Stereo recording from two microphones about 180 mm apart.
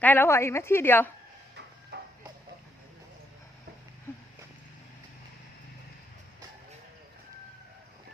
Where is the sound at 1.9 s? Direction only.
70° right (ahead or behind).